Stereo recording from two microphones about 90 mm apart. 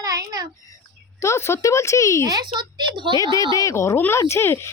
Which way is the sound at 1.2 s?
30° left (ahead or behind).